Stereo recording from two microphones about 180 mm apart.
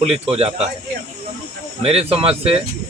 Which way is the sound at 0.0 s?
35° right (ahead or behind).